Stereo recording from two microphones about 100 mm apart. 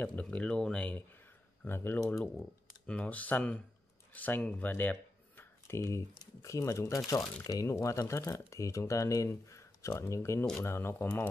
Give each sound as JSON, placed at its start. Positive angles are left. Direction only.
{"t": 0.0, "sound": "speech", "side_deg": 15}